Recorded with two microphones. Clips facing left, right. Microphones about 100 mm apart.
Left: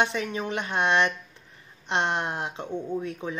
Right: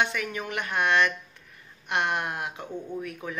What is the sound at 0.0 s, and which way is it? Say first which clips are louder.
Speech: left 2 dB; 25° left (ahead or behind).